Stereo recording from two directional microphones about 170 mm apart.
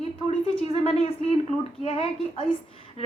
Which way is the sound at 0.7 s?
35° left (ahead or behind).